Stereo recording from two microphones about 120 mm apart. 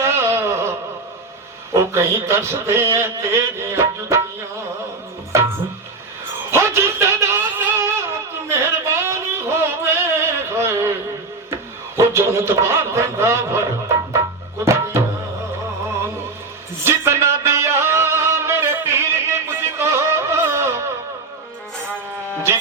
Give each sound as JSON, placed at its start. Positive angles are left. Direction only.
{"t": 0.0, "sound": "wail", "side_deg": -20}
{"t": 1.7, "sound": "a man's voice", "side_deg": -20}
{"t": 5.3, "sound": "music", "side_deg": -25}
{"t": 6.5, "sound": "a sound", "side_deg": -20}
{"t": 14.6, "sound": "music", "side_deg": -20}
{"t": 16.8, "sound": "music", "side_deg": -20}